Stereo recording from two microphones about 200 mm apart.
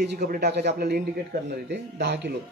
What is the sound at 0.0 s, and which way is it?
A man's voice, 55° right (ahead or behind).